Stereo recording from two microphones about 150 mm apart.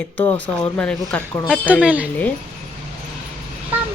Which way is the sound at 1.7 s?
10° right (ahead or behind).